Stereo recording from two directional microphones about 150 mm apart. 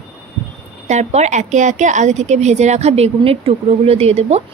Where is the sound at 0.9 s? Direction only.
50° right (ahead or behind).